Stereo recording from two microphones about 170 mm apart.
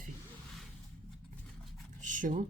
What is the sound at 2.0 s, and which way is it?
Speech, 50° right (ahead or behind).